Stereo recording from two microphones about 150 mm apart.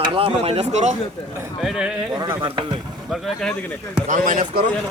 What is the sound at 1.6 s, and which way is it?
Speech, centre (ahead or behind).